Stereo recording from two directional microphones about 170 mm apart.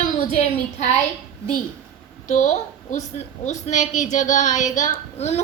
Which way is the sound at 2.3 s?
45° left (ahead or behind).